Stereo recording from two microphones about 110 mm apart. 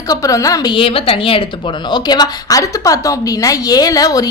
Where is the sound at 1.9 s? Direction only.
40° left (ahead or behind).